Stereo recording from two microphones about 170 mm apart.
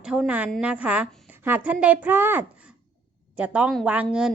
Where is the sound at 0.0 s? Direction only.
5° right (ahead or behind).